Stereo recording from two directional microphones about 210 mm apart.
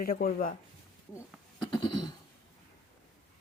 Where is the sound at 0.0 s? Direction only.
45° left (ahead or behind).